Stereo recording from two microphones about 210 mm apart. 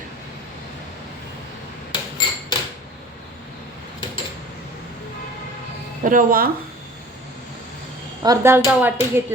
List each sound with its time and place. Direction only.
1.9 s hammer: 20° left (ahead or behind)
6.0 s speech: 40° right (ahead or behind)
8.2 s speech: 15° right (ahead or behind)